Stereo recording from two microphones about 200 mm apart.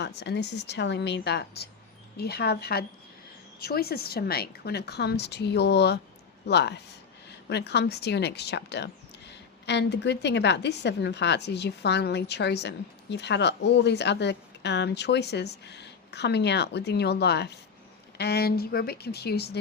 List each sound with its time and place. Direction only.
0.0 s speech: 55° left (ahead or behind)